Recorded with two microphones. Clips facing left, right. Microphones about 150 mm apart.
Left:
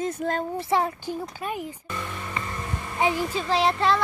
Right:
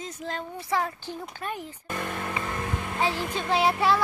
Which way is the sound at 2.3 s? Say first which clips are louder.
Right 2 dB; 60° right (ahead or behind).